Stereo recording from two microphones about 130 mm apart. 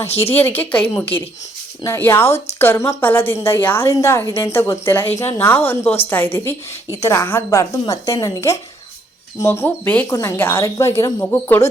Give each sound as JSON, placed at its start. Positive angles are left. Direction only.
{"t": 0.1, "sound": "a woman's voice", "side_deg": 50}
{"t": 0.3, "sound": "a woman's voice", "side_deg": 15}